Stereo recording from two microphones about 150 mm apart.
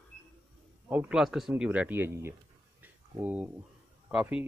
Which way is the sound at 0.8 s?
10° right (ahead or behind).